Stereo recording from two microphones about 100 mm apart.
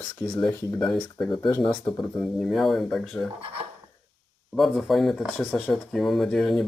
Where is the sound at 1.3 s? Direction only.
50° left (ahead or behind).